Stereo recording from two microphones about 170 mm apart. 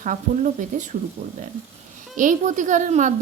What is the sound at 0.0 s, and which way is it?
Speech, 45° right (ahead or behind).